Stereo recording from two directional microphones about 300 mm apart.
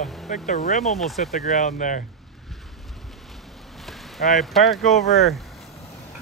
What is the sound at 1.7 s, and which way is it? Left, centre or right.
Speech, left.